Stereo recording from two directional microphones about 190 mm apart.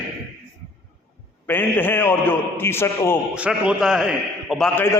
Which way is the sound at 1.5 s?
10° left (ahead or behind).